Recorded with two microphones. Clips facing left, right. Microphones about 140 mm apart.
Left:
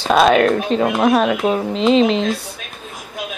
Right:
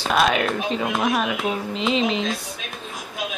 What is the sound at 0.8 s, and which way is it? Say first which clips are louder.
Speech: left 8 dB; 65° left (ahead or behind).